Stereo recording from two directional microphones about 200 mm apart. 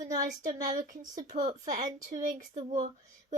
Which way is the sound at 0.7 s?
40° right (ahead or behind).